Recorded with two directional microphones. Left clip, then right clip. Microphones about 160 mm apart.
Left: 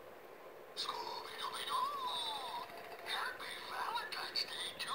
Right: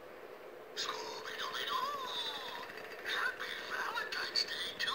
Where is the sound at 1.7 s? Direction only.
35° right (ahead or behind).